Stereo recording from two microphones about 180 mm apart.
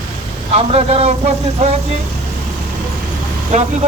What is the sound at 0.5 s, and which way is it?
Speech, 35° right (ahead or behind).